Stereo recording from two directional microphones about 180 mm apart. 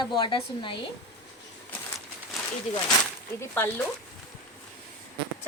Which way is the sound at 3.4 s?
15° left (ahead or behind).